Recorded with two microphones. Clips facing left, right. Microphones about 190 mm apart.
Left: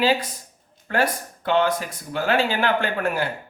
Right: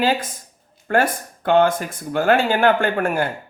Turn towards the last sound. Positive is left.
turn(degrees=-50)  # may be behind; listen again after turning